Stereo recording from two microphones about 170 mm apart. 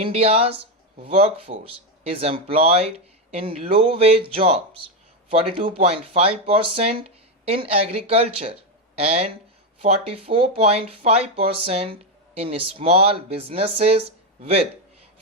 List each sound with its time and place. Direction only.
0.1 s speech: 35° right (ahead or behind)